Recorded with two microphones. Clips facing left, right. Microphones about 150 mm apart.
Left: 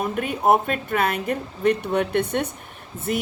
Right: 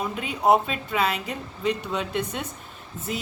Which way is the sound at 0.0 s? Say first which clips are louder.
Left 2 dB; 55° left (ahead or behind).